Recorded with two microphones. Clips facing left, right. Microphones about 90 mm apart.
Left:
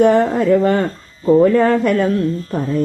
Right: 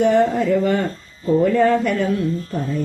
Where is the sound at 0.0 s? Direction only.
50° left (ahead or behind).